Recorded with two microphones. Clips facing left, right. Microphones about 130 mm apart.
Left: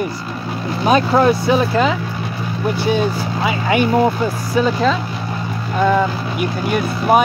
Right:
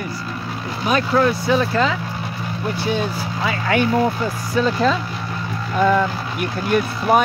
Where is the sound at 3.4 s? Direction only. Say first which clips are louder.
Left 2 dB; 15° left (ahead or behind).